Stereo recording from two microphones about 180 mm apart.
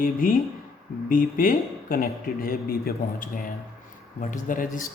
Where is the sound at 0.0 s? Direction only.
50° left (ahead or behind).